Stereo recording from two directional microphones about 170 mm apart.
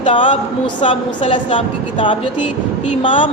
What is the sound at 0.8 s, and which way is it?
A woman's voice, 35° left (ahead or behind).